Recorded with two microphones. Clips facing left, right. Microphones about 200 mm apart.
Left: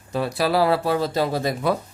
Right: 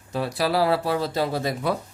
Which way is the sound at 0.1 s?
55° left (ahead or behind).